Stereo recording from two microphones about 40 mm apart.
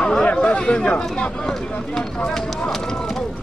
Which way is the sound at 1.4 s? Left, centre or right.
Centre.